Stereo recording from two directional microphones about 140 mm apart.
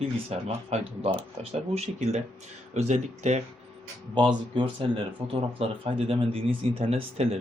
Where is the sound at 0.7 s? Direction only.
50° right (ahead or behind).